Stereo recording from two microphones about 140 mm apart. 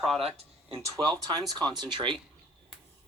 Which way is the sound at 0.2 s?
45° right (ahead or behind).